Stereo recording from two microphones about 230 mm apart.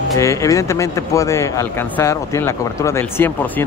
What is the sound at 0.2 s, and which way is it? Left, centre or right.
Speech, centre.